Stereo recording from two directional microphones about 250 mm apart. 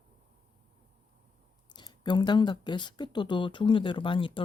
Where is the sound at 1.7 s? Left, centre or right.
Centre.